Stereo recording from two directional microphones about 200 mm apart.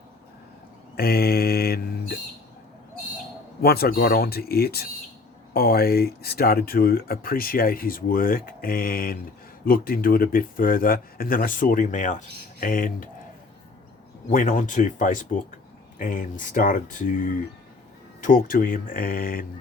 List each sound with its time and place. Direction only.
0.9 s mantra: 50° left (ahead or behind)
3.6 s speech: 50° left (ahead or behind)
14.3 s speech: 40° left (ahead or behind)